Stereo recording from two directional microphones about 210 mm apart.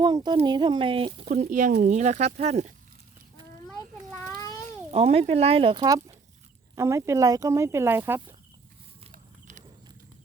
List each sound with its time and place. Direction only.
0.0 s speech: 20° right (ahead or behind)
4.6 s speech: 30° right (ahead or behind); by 8.4 s 10° right (ahead or behind)
9.1 s horse: 35° right (ahead or behind)